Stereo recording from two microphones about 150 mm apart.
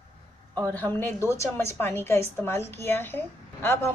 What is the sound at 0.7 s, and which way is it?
A woman's voice, 15° left (ahead or behind).